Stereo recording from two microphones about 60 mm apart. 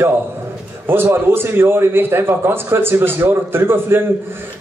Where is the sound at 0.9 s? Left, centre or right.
Right.